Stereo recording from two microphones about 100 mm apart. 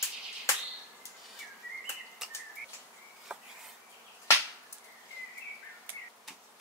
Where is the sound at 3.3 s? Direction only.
10° right (ahead or behind).